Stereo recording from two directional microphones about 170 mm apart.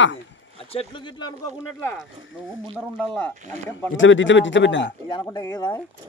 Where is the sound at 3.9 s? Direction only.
90° left.